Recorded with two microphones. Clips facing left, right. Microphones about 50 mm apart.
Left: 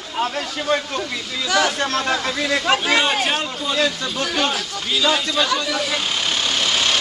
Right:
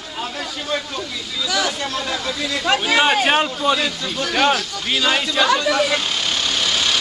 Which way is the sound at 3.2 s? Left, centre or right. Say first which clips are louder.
Right 5 dB; right.